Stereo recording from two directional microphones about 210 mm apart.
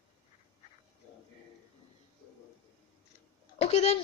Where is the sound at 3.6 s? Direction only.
30° left (ahead or behind).